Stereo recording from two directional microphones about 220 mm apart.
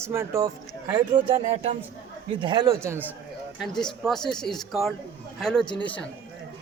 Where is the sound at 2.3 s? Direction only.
20° right (ahead or behind).